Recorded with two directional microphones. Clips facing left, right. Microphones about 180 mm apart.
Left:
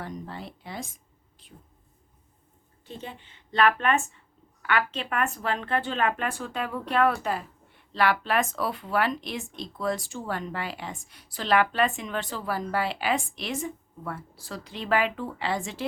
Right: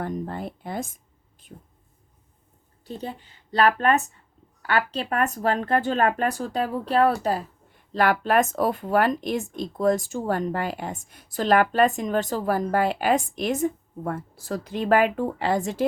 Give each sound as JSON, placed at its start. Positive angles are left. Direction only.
{"t": 0.0, "sound": "speech", "side_deg": -50}
{"t": 2.8, "sound": "a woman's voice", "side_deg": -40}